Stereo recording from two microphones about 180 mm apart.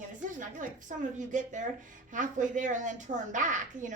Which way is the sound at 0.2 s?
45° right (ahead or behind).